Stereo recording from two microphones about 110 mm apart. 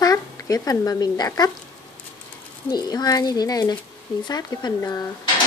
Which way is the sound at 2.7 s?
40° left (ahead or behind).